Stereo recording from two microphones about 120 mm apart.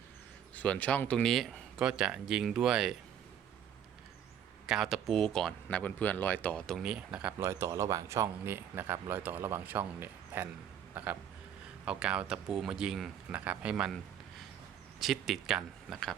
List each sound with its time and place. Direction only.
0.5 s speech: 15° left (ahead or behind); by 2.9 s 5° right (ahead or behind)
4.6 s speech: centre (ahead or behind)
7.3 s speech: 25° right (ahead or behind); by 13.9 s 10° right (ahead or behind)
14.9 s speech: centre (ahead or behind)